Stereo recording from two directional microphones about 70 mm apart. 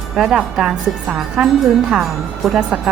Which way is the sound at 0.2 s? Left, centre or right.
Centre.